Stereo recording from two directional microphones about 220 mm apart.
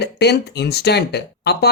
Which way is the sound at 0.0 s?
50° left (ahead or behind).